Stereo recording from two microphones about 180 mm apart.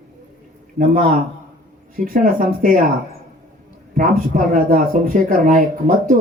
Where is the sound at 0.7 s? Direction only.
50° right (ahead or behind).